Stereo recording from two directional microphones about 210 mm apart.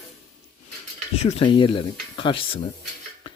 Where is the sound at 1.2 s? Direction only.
25° left (ahead or behind).